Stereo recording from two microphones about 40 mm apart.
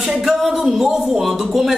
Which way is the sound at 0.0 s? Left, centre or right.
Centre.